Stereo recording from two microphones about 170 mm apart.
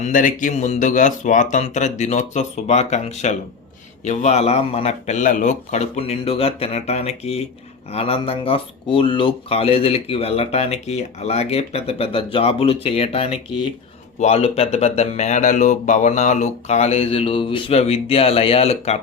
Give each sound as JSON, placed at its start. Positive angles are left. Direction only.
{"t": 0.0, "sound": "speech", "side_deg": 50}